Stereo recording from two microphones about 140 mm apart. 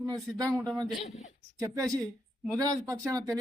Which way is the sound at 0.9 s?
50° left (ahead or behind).